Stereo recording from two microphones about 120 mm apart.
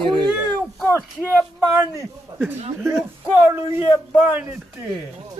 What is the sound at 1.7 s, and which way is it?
Speech, 20° right (ahead or behind).